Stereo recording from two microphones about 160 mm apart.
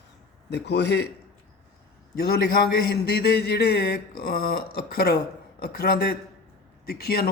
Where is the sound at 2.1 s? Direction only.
75° left (ahead or behind).